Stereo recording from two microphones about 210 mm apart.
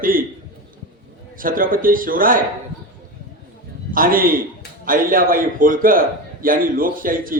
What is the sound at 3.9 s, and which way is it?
A man's voice, 40° right (ahead or behind).